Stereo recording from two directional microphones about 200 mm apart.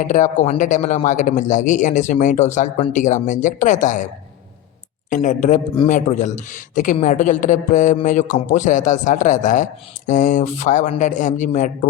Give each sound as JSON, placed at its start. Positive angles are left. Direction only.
{"t": 0.1, "sound": "speech", "side_deg": 40}